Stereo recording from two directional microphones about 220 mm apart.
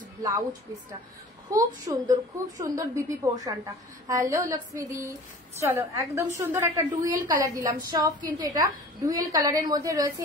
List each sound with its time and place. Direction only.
0.2 s a woman's voice: 15° right (ahead or behind)